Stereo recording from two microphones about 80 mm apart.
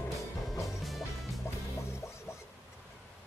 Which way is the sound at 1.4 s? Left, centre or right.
Left.